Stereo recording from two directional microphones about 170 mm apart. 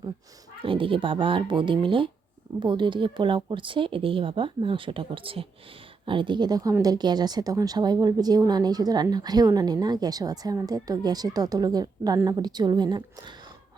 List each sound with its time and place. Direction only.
0.6 s speech: 30° right (ahead or behind)